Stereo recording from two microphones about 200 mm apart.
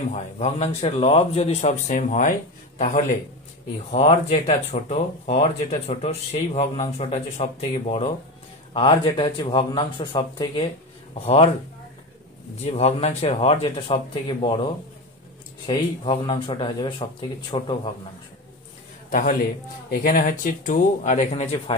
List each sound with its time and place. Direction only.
0.1 s speech: 35° left (ahead or behind)
3.9 s speech: 35° left (ahead or behind)
8.7 s speech: 25° left (ahead or behind)
12.6 s speech: 35° left (ahead or behind)
19.0 s a man's voice: 45° left (ahead or behind)